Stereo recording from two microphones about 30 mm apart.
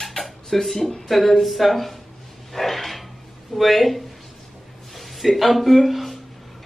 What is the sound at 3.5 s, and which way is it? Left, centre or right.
Speech, centre.